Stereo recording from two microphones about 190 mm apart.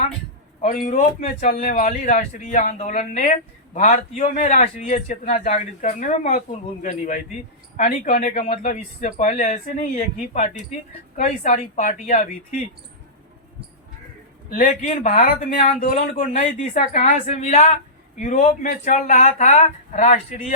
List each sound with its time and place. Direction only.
0.6 s speech: 45° left (ahead or behind)
14.5 s speech: 40° left (ahead or behind)
15.5 s speech: 30° left (ahead or behind)
15.8 s speech: 45° left (ahead or behind)